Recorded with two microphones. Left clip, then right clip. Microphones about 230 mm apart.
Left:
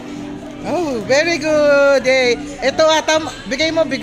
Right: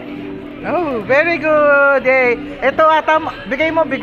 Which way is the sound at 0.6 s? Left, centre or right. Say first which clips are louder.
Right 2 dB; centre.